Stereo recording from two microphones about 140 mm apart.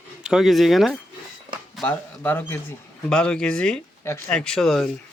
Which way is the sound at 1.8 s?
15° left (ahead or behind).